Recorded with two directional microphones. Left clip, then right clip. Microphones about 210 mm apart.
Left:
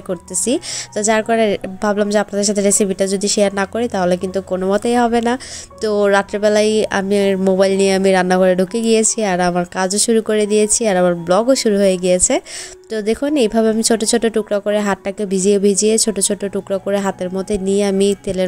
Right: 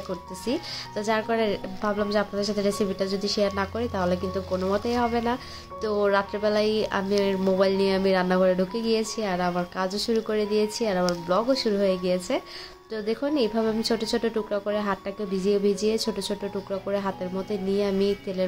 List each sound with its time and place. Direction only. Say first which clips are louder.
0.1 s a woman's voice: left 11 dB; 35° left (ahead or behind)